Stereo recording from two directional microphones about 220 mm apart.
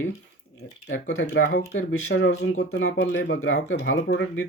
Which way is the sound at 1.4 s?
40° left (ahead or behind).